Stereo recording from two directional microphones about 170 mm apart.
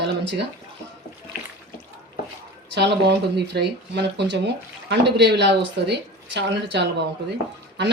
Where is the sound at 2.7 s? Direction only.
90° right.